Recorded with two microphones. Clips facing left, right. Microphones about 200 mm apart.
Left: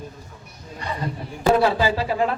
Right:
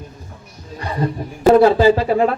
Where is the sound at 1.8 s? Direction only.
50° right (ahead or behind).